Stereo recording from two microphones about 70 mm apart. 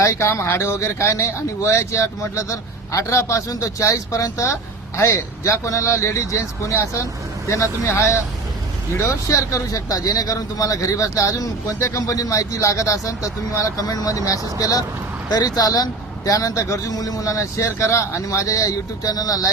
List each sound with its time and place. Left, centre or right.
0.0 s speech: left